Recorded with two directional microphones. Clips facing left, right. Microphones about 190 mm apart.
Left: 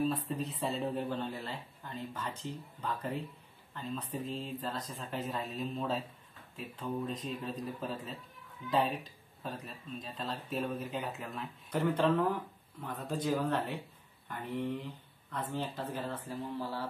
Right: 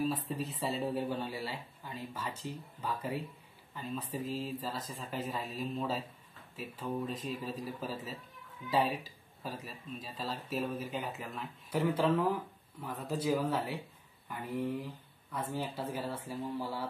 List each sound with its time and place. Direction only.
0.0 s speech: 5° right (ahead or behind)